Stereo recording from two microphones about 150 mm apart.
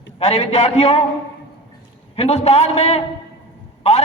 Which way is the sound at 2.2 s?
45° left (ahead or behind).